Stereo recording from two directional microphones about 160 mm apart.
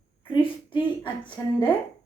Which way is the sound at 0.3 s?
30° left (ahead or behind).